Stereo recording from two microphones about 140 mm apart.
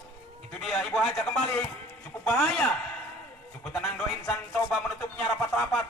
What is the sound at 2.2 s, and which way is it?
Music, 15° left (ahead or behind).